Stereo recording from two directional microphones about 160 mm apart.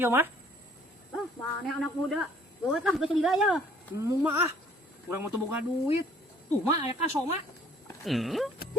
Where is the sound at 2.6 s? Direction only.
Centre (ahead or behind).